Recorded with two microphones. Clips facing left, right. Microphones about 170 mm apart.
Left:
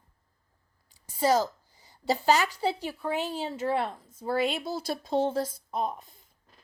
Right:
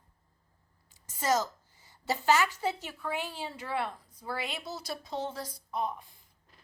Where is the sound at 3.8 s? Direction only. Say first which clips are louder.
Left 4 dB; 25° left (ahead or behind).